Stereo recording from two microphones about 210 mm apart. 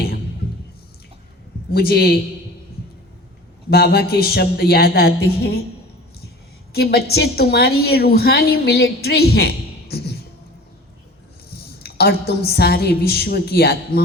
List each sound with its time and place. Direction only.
1.7 s a woman's voice: 45° left (ahead or behind)
3.7 s a woman's voice: 50° left (ahead or behind)
6.7 s a woman's voice: 50° left (ahead or behind)
11.8 s a woman's voice: 50° left (ahead or behind)